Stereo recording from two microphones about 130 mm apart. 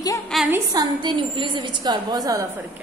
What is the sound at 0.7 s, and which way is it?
A woman's voice, 35° right (ahead or behind).